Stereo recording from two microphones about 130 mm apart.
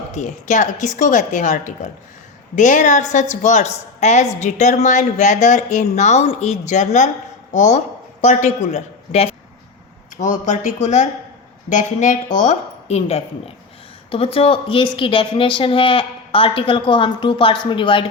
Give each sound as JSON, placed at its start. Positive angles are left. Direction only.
{"t": 0.1, "sound": "a woman's voice", "side_deg": 65}
{"t": 10.2, "sound": "a woman's voice", "side_deg": 70}